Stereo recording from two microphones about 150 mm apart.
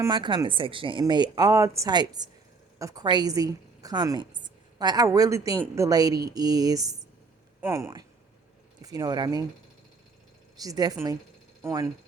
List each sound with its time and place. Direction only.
0.1 s a woman's voice: 30° right (ahead or behind)
10.6 s a woman's voice: 25° right (ahead or behind)